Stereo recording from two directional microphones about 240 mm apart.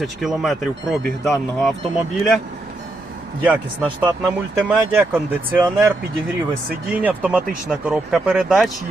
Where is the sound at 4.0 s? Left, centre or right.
Centre.